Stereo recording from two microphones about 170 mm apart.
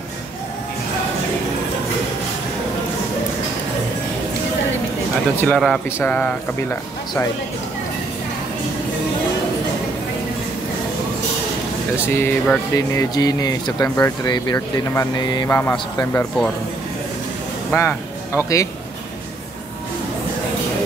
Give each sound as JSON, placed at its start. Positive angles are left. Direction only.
{"t": 5.4, "sound": "speech", "side_deg": 5}
{"t": 12.1, "sound": "speech", "side_deg": 15}
{"t": 17.7, "sound": "speech", "side_deg": 15}